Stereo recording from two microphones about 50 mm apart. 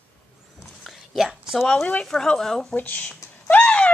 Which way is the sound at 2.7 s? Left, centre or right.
Left.